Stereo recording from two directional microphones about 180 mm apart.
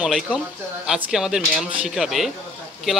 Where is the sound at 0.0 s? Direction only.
Centre (ahead or behind).